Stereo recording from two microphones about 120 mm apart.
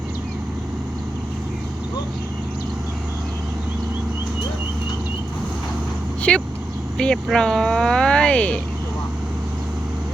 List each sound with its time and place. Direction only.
6.3 s speech: 10° left (ahead or behind)